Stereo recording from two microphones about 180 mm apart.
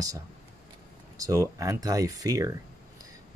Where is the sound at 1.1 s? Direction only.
20° right (ahead or behind).